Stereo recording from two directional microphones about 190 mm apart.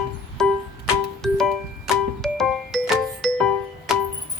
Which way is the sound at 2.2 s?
Centre (ahead or behind).